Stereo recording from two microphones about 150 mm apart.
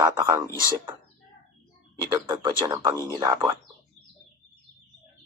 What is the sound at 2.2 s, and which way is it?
Speech, 35° right (ahead or behind).